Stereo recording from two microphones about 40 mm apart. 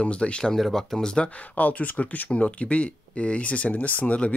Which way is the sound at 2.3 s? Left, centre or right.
Left.